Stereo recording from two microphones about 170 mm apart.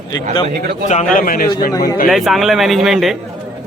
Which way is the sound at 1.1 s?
55° left (ahead or behind).